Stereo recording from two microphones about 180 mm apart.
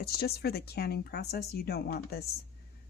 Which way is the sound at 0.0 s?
60° left (ahead or behind).